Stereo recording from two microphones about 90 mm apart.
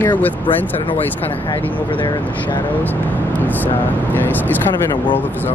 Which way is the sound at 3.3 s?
20° left (ahead or behind).